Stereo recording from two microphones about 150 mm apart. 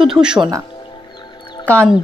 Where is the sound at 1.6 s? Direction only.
10° left (ahead or behind).